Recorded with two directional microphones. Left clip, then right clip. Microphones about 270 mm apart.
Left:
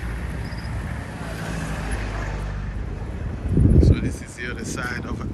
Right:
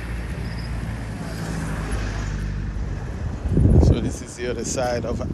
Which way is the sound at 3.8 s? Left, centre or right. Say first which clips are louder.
Right 1 dB; centre.